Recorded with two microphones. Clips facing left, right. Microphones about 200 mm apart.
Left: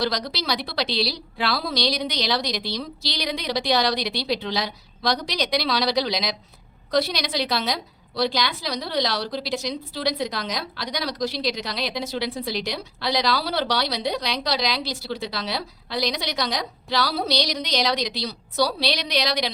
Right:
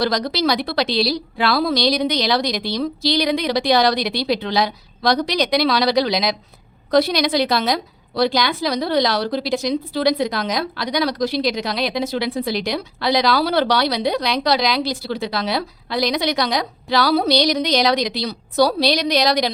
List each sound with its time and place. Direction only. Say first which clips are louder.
0.0 s a woman's voice: right 7 dB; 50° right (ahead or behind)